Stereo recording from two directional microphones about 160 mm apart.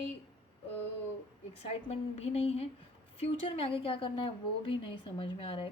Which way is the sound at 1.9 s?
40° left (ahead or behind).